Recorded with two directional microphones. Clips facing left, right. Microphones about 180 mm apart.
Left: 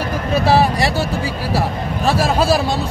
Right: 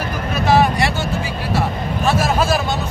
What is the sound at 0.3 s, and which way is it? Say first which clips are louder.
Speech: left 1 dB; 35° left (ahead or behind).